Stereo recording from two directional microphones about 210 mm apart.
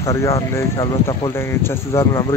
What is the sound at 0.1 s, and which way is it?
Speech, 15° left (ahead or behind).